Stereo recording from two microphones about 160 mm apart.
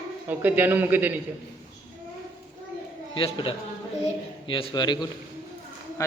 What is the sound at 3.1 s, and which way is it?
A man's voice, 35° left (ahead or behind).